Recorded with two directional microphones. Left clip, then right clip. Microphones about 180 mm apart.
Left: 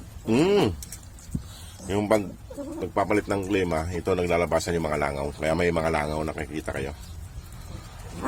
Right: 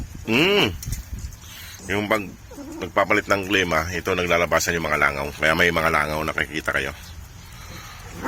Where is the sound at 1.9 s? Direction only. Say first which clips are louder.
Right 1 dB; 15° left (ahead or behind).